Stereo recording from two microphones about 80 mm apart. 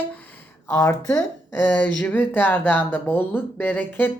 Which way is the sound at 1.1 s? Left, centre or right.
Centre.